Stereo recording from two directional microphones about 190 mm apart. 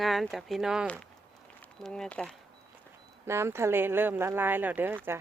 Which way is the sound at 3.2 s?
15° right (ahead or behind).